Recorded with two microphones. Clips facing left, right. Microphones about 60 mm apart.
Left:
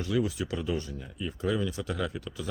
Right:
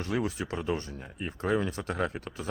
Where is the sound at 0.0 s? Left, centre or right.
Right.